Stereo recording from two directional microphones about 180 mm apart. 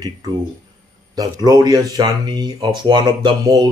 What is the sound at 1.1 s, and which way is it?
Speech, 20° right (ahead or behind).